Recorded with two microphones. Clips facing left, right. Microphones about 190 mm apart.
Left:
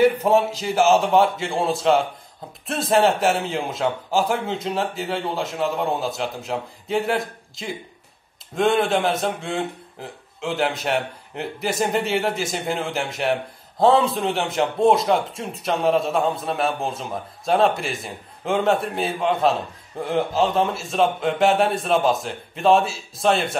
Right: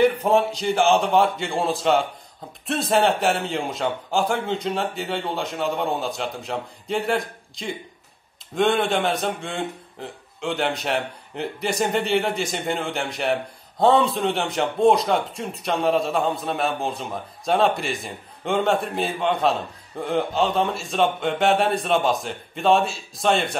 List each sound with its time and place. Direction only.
0.0 s speech: centre (ahead or behind)